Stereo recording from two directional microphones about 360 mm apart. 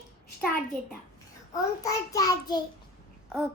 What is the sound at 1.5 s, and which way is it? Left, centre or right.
A child's voice, centre.